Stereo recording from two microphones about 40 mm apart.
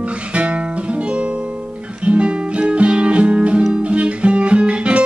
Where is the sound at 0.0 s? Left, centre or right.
Right.